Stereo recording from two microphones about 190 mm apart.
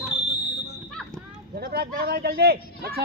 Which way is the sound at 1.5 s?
55° right (ahead or behind).